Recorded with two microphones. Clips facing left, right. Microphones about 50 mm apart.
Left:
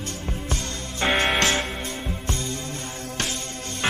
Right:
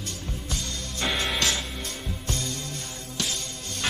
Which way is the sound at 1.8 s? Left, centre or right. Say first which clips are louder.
Left 4 dB; left.